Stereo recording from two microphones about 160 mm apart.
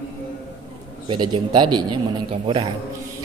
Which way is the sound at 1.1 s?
30° right (ahead or behind).